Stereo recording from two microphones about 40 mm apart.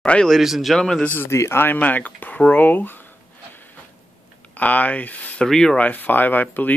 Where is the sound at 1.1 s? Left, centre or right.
Left.